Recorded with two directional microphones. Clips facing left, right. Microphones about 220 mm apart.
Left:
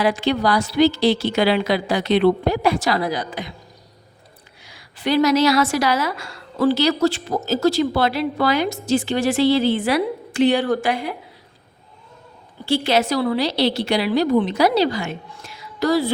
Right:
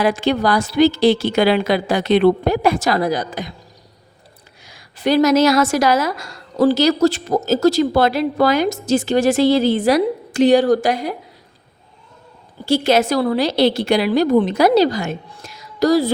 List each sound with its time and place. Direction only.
0.0 s a woman's voice: 45° right (ahead or behind)
4.6 s a woman's voice: 45° right (ahead or behind)
12.6 s a woman's voice: 45° right (ahead or behind)